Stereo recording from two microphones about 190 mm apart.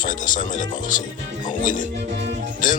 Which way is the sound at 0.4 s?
45° left (ahead or behind).